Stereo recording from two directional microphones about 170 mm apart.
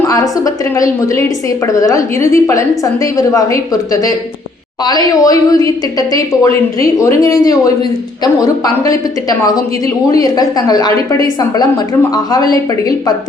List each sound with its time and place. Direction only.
0.1 s a woman's voice: 20° left (ahead or behind)